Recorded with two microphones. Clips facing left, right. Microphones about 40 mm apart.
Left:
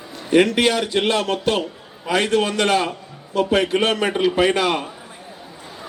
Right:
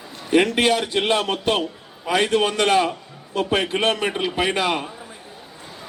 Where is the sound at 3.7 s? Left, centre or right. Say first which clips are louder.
Left 2 dB; centre.